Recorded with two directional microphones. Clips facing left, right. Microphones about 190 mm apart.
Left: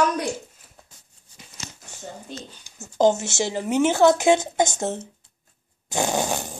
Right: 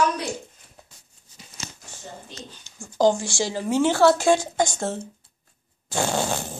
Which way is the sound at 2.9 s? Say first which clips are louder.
Left 1 dB; 20° left (ahead or behind).